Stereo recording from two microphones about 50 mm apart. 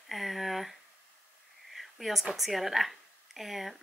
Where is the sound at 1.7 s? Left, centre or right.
Centre.